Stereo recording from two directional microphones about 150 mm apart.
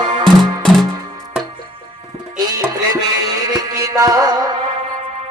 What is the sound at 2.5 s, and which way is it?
Music, 20° right (ahead or behind).